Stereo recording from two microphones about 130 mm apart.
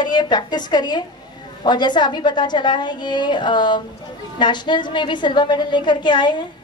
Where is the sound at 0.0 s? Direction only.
35° left (ahead or behind).